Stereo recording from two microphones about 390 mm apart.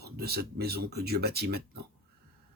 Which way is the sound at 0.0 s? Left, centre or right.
Right.